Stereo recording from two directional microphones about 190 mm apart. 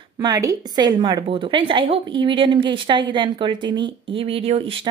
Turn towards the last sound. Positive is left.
turn(degrees=-30)  # may be behind; listen again after turning